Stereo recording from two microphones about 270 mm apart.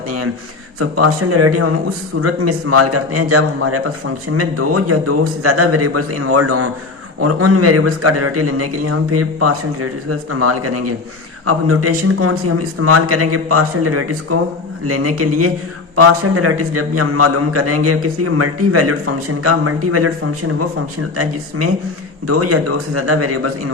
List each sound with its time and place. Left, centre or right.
0.8 s a man's voice: right
22.3 s a man's voice: right